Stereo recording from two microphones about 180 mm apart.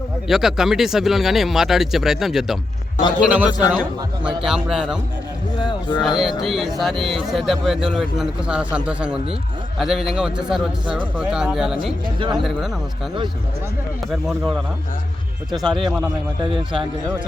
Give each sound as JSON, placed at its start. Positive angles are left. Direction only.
{"t": 0.3, "sound": "a man's voice", "side_deg": 0}
{"t": 5.5, "sound": "speech", "side_deg": 25}
{"t": 6.0, "sound": "speech", "side_deg": 0}
{"t": 10.8, "sound": "a man's voice", "side_deg": -25}
{"t": 11.2, "sound": "speech", "side_deg": -5}
{"t": 14.1, "sound": "speech", "side_deg": 0}
{"t": 15.6, "sound": "a man's voice", "side_deg": -25}